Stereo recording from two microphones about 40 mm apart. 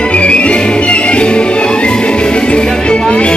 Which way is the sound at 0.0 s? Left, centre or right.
Left.